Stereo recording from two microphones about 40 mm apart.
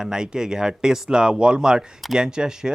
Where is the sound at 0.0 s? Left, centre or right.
Centre.